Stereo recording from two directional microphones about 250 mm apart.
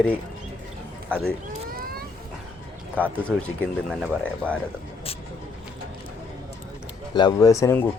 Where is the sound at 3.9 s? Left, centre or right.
Centre.